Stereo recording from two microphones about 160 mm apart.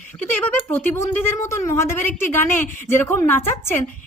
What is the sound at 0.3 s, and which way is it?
A woman's voice, 10° left (ahead or behind).